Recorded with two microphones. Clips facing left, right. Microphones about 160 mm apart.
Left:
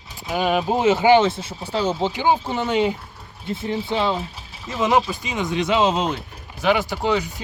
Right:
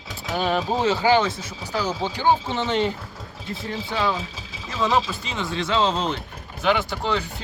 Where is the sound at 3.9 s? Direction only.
25° left (ahead or behind).